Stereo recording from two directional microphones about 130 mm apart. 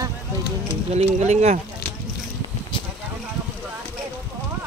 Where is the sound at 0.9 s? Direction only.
55° right (ahead or behind).